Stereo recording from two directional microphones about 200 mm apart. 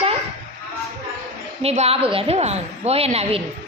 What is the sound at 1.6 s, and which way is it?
A woman's voice, 30° right (ahead or behind).